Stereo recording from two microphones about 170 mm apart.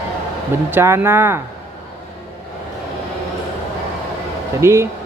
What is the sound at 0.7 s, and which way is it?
Speech, 15° right (ahead or behind).